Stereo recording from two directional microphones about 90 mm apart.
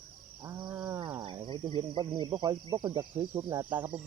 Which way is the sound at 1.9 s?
55° right (ahead or behind).